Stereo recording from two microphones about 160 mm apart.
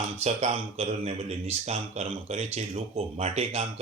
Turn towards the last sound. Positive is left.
turn(degrees=-40)  # may be behind; listen again after turning